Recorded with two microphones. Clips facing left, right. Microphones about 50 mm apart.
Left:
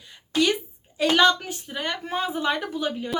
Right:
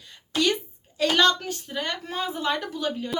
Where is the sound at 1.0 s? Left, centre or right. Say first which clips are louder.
Left 2 dB; centre.